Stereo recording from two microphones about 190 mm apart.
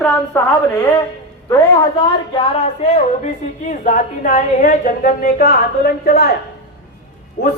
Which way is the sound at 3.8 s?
45° left (ahead or behind).